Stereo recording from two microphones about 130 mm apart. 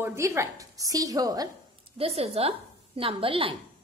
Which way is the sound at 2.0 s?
50° right (ahead or behind).